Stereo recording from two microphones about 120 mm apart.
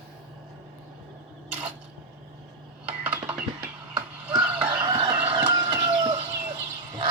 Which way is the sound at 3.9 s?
45° right (ahead or behind).